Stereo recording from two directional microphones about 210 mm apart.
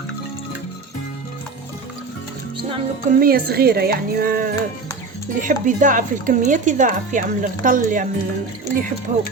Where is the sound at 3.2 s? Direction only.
45° right (ahead or behind).